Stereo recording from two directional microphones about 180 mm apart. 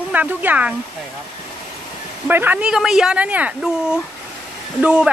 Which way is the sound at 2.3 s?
10° right (ahead or behind).